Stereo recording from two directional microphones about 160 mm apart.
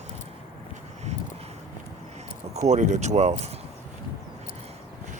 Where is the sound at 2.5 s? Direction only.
45° right (ahead or behind).